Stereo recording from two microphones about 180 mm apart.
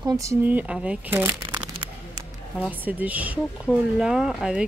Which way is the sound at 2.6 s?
10° right (ahead or behind).